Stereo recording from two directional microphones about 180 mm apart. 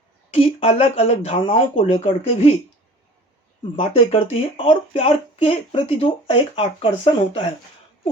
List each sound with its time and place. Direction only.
0.3 s speech: 35° left (ahead or behind)
3.6 s speech: 30° left (ahead or behind)